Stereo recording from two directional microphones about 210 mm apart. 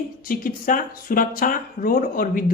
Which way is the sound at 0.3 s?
40° left (ahead or behind).